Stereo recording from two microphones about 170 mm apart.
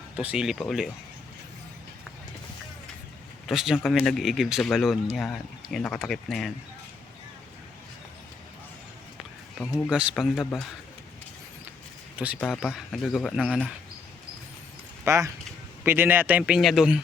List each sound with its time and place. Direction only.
0.2 s speech: 5° right (ahead or behind)
3.4 s speech: 5° right (ahead or behind)
9.9 s speech: 5° right (ahead or behind)
12.2 s speech: 10° right (ahead or behind)
15.0 s speech: 15° right (ahead or behind)